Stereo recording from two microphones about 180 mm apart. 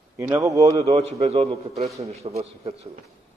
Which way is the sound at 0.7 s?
35° right (ahead or behind).